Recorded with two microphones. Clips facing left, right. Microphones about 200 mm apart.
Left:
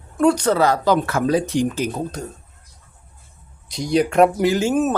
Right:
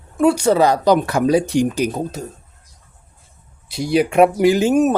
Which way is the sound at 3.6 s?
5° right (ahead or behind).